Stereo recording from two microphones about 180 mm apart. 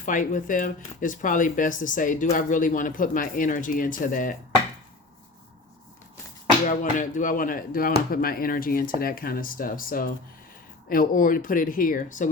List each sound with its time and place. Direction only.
0.0 s speech: 45° left (ahead or behind)
6.7 s speech: 45° left (ahead or behind)